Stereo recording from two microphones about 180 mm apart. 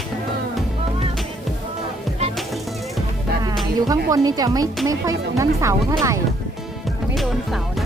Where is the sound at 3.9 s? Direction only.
20° right (ahead or behind).